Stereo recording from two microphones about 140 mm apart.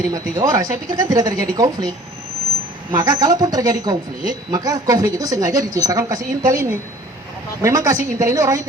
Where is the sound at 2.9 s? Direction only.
25° right (ahead or behind).